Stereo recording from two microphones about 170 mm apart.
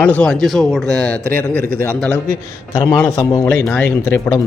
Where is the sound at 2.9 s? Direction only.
15° left (ahead or behind).